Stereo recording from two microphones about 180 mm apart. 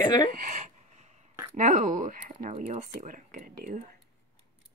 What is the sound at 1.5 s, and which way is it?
Speech, 45° right (ahead or behind).